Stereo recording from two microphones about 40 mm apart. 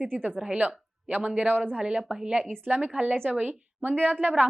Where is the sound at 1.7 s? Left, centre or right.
Right.